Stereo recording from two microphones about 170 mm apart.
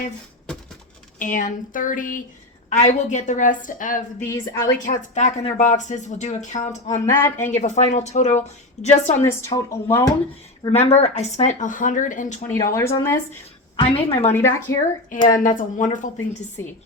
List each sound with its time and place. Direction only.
1.2 s speech: 50° left (ahead or behind)
2.6 s speech: 40° left (ahead or behind)
4.2 s speech: 15° left (ahead or behind)
4.9 s speech: 45° left (ahead or behind)
7.0 s speech: 15° left (ahead or behind)
7.6 s a woman's voice: 45° left (ahead or behind)
9.2 s speech: 15° left (ahead or behind)
10.7 s speech: 40° left (ahead or behind)
12.7 s speech: 15° left (ahead or behind)
13.8 s a woman's voice: 35° left (ahead or behind)
15.3 s speech: 50° left (ahead or behind)